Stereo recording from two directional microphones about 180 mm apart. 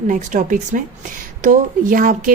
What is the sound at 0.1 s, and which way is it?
Speech, 45° right (ahead or behind).